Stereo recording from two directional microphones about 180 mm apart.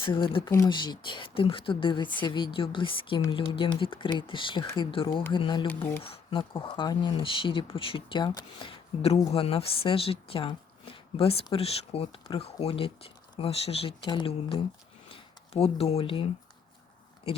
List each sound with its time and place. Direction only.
0.0 s speech: 30° left (ahead or behind)
5.6 s speech: 10° left (ahead or behind)
6.0 s speech: 30° left (ahead or behind)